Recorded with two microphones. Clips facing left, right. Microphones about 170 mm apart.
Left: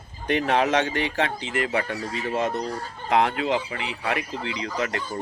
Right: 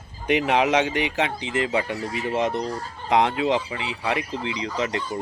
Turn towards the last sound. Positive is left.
turn(degrees=-20)  # may be behind; listen again after turning